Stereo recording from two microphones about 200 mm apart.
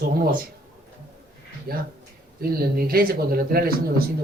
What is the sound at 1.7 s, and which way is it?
Speech, 50° right (ahead or behind).